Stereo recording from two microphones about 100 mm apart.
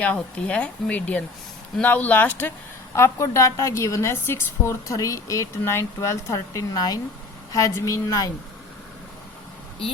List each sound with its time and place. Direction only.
0.0 s speech: 15° left (ahead or behind)
2.9 s a woman's voice: 30° left (ahead or behind)
7.5 s a woman's voice: 30° left (ahead or behind)